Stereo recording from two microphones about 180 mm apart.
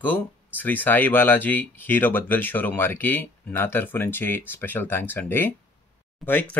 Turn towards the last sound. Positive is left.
turn(degrees=10)  # may be behind; listen again after turning